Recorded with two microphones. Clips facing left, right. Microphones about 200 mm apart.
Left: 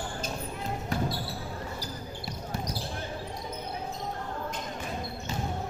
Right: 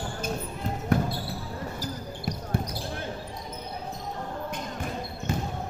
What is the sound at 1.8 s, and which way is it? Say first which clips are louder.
Basketball bounce: right 5 dB; 50° right (ahead or behind).